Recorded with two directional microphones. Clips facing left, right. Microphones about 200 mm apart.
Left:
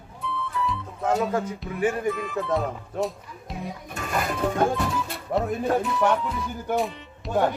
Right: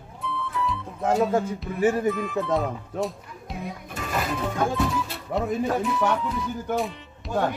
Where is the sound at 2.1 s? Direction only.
Centre (ahead or behind).